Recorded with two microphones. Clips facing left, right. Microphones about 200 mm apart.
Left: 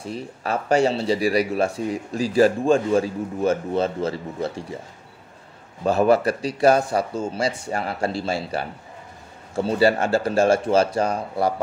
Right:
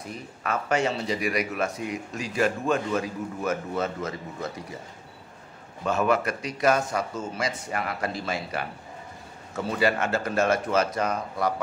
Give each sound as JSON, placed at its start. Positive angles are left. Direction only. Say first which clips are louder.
{"t": 0.0, "sound": "speech", "louder": "left 5 dB", "side_deg": 30}
{"t": 5.9, "sound": "speech", "louder": "left 6 dB", "side_deg": 35}